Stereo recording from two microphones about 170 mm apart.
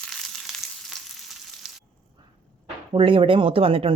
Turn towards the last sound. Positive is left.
turn(degrees=-35)  # may be behind; listen again after turning